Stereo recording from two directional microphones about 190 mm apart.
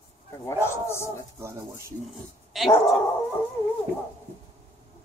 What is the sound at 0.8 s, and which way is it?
Speech, 15° left (ahead or behind).